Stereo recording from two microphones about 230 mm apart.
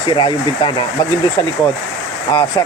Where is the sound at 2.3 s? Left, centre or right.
Centre.